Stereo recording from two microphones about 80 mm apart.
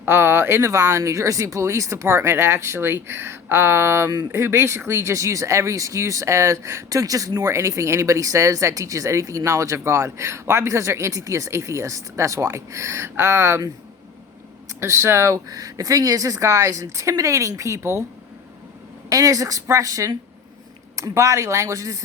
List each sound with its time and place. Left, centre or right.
0.0 s speech: right
14.8 s speech: right
19.0 s speech: right